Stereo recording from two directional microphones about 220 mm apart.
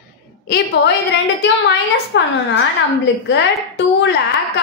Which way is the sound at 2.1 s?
55° left (ahead or behind).